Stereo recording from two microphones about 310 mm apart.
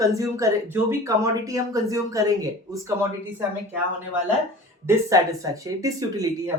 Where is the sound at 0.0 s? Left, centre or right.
Centre.